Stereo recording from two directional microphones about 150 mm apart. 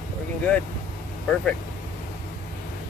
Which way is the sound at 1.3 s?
Centre (ahead or behind).